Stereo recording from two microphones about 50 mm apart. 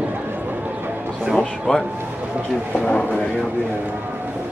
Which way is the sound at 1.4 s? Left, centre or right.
Centre.